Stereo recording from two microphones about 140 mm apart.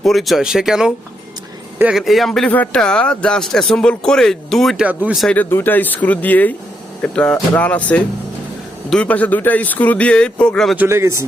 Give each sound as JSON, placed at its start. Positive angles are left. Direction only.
{"t": 0.0, "sound": "speech", "side_deg": 0}
{"t": 4.9, "sound": "speech", "side_deg": -10}
{"t": 5.2, "sound": "speech", "side_deg": 10}
{"t": 10.8, "sound": "a man's voice", "side_deg": -20}